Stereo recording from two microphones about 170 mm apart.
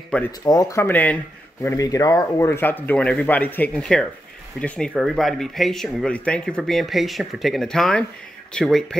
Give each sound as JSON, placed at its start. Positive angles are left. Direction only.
{"t": 0.1, "sound": "speech", "side_deg": 10}
{"t": 0.5, "sound": "speech", "side_deg": 20}